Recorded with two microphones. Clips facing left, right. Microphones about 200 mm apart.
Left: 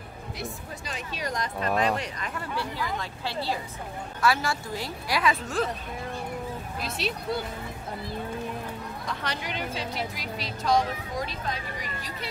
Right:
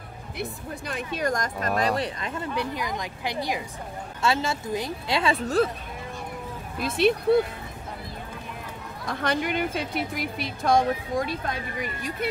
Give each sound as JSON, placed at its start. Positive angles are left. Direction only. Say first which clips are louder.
{"t": 0.4, "sound": "speech", "louder": "right 5 dB", "side_deg": -55}
{"t": 1.8, "sound": "speech", "louder": "right 3 dB", "side_deg": -35}
{"t": 2.4, "sound": "a woman's voice", "louder": "right 3 dB", "side_deg": -20}
{"t": 6.8, "sound": "speech", "louder": "right 11 dB", "side_deg": -55}
{"t": 9.1, "sound": "speech", "louder": "right 9 dB", "side_deg": -50}